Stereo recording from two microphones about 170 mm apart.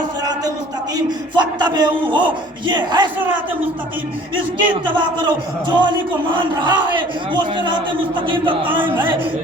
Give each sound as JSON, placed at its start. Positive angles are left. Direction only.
{"t": 0.9, "sound": "speech", "side_deg": -25}
{"t": 4.7, "sound": "speech", "side_deg": -25}